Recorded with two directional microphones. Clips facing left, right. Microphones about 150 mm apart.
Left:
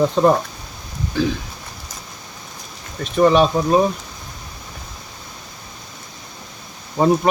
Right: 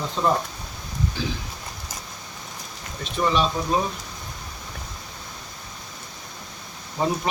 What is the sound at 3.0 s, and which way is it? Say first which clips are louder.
Speech: left 9 dB; 55° left (ahead or behind).